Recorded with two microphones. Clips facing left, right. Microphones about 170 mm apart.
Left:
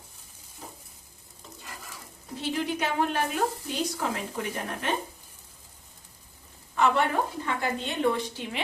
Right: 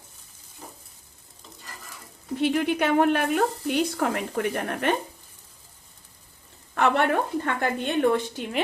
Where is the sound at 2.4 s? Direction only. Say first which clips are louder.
Right 6 dB; 60° right (ahead or behind).